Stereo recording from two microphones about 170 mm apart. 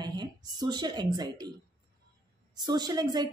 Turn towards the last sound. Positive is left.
turn(degrees=-25)  # may be behind; listen again after turning